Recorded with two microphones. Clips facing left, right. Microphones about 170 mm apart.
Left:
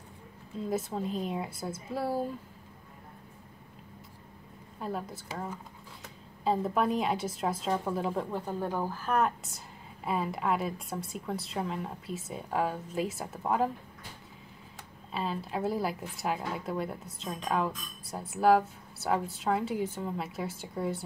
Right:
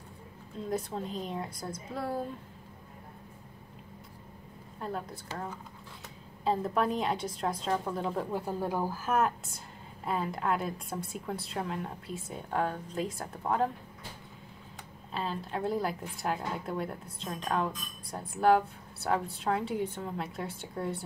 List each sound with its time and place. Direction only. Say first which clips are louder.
0.7 s a woman's voice: left 2 dB; 5° left (ahead or behind)
4.7 s a woman's voice: left 1 dB; 5° left (ahead or behind)
8.3 s a woman's voice: right 1 dB; 10° right (ahead or behind)
15.1 s a woman's voice: left 1 dB; centre (ahead or behind)